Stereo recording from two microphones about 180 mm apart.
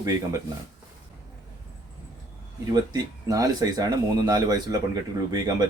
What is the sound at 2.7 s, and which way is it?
Speech, 20° right (ahead or behind).